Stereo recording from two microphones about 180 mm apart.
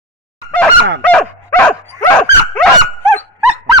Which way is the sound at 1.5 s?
5° left (ahead or behind).